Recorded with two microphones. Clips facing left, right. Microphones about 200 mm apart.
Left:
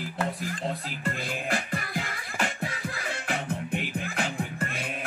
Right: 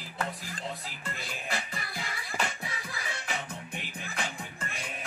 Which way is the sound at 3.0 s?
55° left (ahead or behind).